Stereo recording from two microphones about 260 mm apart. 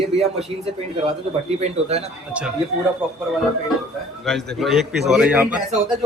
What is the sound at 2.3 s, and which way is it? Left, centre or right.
Speech, centre.